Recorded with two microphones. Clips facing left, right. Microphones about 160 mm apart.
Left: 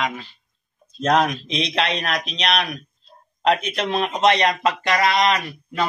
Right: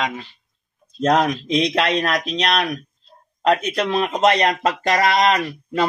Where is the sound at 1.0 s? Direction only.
40° right (ahead or behind).